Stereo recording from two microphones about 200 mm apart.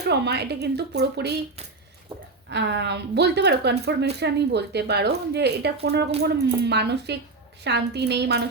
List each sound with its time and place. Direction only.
0.0 s a woman's voice: 55° right (ahead or behind)
2.5 s a woman's voice: 60° right (ahead or behind)